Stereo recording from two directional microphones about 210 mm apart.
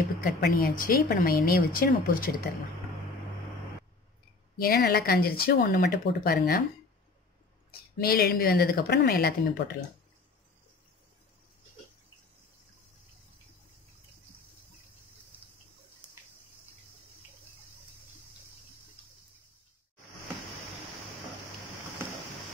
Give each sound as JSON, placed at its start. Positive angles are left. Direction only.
{"t": 0.2, "sound": "speech", "side_deg": 45}
{"t": 4.6, "sound": "speech", "side_deg": 45}
{"t": 8.0, "sound": "speech", "side_deg": 45}